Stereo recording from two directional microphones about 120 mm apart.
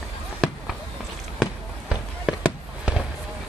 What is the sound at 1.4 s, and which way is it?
Fireworks, 5° right (ahead or behind).